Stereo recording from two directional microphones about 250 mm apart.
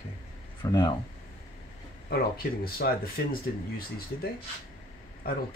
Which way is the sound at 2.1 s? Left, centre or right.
Left.